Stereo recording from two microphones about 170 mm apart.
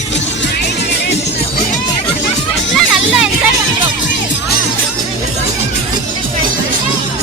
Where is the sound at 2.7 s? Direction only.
Centre (ahead or behind).